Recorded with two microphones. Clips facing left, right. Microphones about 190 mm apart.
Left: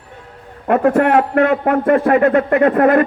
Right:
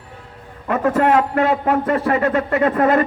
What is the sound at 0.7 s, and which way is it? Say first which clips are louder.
A man's voice: left 3 dB; 60° left (ahead or behind).